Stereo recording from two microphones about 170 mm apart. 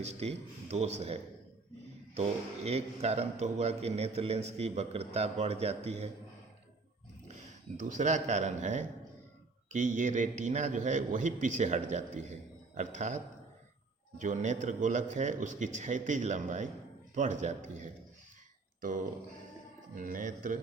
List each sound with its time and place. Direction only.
0.0 s a man's voice: 40° right (ahead or behind)
2.6 s a man's voice: 40° right (ahead or behind)
7.8 s a man's voice: 45° right (ahead or behind)
20.0 s a man's voice: 50° right (ahead or behind)